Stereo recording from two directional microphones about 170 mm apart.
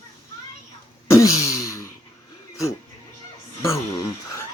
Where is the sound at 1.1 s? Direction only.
20° left (ahead or behind).